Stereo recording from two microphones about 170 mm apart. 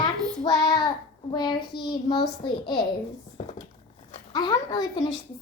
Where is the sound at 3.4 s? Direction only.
35° left (ahead or behind).